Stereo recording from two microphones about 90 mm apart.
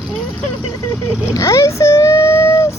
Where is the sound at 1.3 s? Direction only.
35° left (ahead or behind).